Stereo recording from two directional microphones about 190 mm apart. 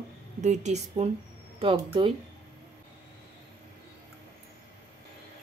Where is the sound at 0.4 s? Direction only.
35° right (ahead or behind).